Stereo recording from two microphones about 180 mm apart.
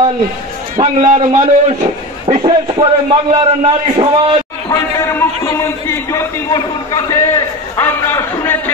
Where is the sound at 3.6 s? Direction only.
30° right (ahead or behind).